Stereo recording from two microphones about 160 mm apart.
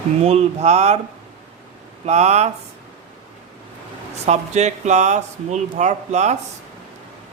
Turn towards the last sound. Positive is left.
turn(degrees=-45)  # may be behind; listen again after turning